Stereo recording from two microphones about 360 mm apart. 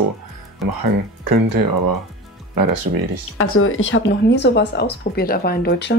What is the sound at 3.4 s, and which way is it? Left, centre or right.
Speech, left.